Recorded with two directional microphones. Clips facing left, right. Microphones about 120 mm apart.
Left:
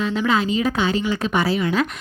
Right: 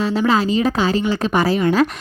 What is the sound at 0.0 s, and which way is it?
Speech, 35° right (ahead or behind).